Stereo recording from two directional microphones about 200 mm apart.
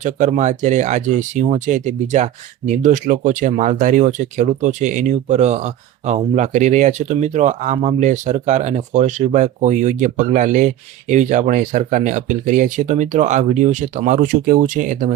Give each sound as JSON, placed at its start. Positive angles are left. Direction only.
{"t": 0.0, "sound": "speech", "side_deg": -35}